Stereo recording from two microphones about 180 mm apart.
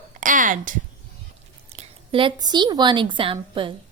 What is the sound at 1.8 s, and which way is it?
A woman's voice, 30° right (ahead or behind).